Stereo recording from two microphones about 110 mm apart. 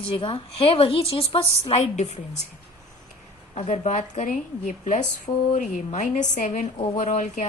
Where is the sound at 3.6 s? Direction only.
90° left.